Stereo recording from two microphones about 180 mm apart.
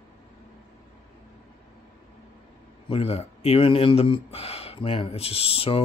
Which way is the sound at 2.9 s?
35° left (ahead or behind).